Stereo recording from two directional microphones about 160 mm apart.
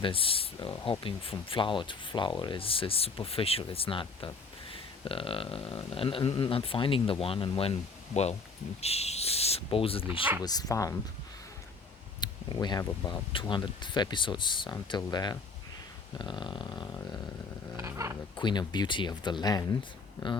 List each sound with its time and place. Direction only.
0.0 s speech: 35° left (ahead or behind)
10.4 s speech: 25° left (ahead or behind)
12.2 s speech: 25° left (ahead or behind)
17.7 s speech: 20° right (ahead or behind)
18.3 s speech: 30° left (ahead or behind)